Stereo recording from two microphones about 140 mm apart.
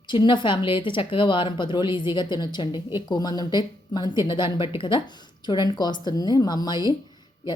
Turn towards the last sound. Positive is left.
turn(degrees=30)  # may be behind; listen again after turning